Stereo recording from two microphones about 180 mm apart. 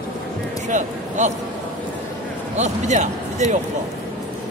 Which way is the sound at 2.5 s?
40° right (ahead or behind).